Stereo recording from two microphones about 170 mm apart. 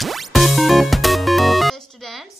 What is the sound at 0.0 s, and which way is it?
Music, centre (ahead or behind).